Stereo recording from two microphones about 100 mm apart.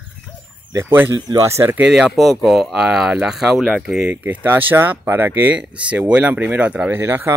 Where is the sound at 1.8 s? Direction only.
10° right (ahead or behind).